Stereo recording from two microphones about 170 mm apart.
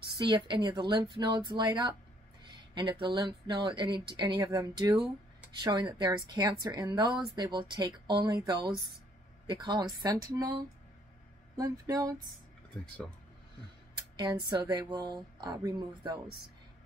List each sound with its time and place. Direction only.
0.2 s a woman's voice: 25° right (ahead or behind)
13.9 s a sound: 25° right (ahead or behind)
14.5 s a woman's voice: 25° right (ahead or behind)